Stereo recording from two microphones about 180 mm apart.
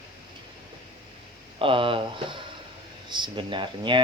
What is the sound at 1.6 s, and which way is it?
Speech, 30° right (ahead or behind).